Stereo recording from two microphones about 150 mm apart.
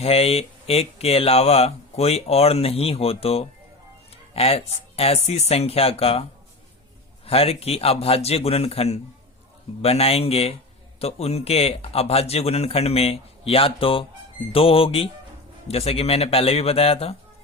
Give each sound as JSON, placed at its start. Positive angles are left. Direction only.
{"t": 0.0, "sound": "speech", "side_deg": 40}
{"t": 7.3, "sound": "speech", "side_deg": 40}